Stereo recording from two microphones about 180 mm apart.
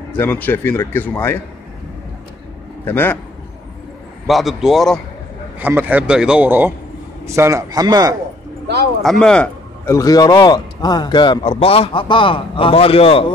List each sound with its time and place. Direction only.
0.1 s speech: 10° left (ahead or behind)
2.8 s speech: 10° left (ahead or behind)
4.3 s a man's voice: centre (ahead or behind)
5.6 s speech: 10° right (ahead or behind)
9.2 s a man's voice: 5° left (ahead or behind)
9.8 s a man's voice: 20° left (ahead or behind)